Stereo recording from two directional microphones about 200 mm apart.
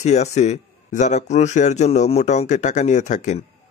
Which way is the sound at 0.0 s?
35° left (ahead or behind).